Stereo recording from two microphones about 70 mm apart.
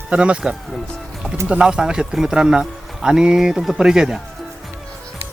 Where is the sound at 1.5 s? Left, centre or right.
Centre.